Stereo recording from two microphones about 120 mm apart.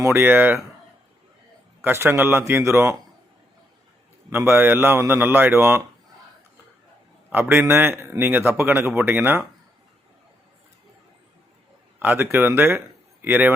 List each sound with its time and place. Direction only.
0.0 s speech: 20° right (ahead or behind)
1.8 s a man's voice: 20° right (ahead or behind)
4.3 s a man's voice: 20° right (ahead or behind)
7.3 s a man's voice: 15° right (ahead or behind)
11.9 s speech: 15° right (ahead or behind)